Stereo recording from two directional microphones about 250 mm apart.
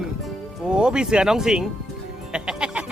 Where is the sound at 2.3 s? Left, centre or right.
Centre.